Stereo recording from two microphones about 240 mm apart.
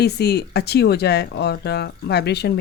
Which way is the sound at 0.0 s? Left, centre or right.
Left.